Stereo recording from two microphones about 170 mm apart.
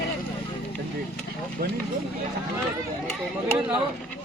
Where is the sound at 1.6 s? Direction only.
60° right (ahead or behind).